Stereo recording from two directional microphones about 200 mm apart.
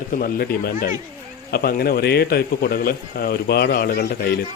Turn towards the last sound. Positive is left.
turn(degrees=55)  # may be behind; listen again after turning